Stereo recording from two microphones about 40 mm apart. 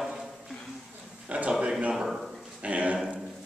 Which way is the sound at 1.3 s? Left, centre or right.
Right.